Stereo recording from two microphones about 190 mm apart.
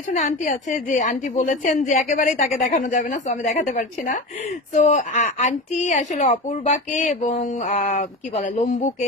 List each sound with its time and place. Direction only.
0.2 s a woman's voice: 45° left (ahead or behind)